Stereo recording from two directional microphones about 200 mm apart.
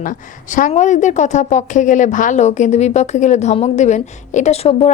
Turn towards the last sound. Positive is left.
turn(degrees=30)  # may be behind; listen again after turning